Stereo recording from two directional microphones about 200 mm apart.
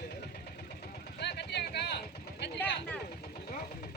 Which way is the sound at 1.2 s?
55° left (ahead or behind).